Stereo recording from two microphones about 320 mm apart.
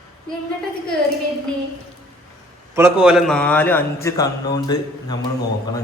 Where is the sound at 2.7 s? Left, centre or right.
Centre.